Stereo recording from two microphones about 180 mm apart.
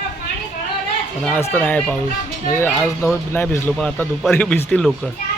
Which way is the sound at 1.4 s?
10° left (ahead or behind).